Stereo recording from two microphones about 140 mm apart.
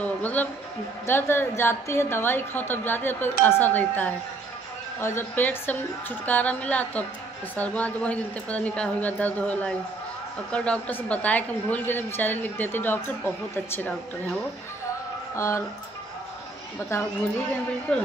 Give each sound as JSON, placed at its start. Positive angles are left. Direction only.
{"t": 0.0, "sound": "music", "side_deg": 10}
{"t": 1.0, "sound": "a woman's voice", "side_deg": 15}
{"t": 15.3, "sound": "speech", "side_deg": 20}
{"t": 17.9, "sound": "a woman's voice", "side_deg": 5}